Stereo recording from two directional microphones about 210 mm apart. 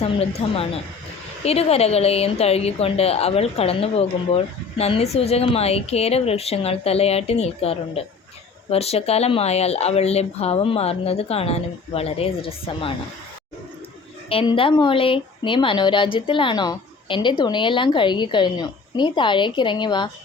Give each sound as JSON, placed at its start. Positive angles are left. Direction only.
{"t": 0.0, "sound": "speech", "side_deg": 30}
{"t": 14.3, "sound": "speech", "side_deg": 25}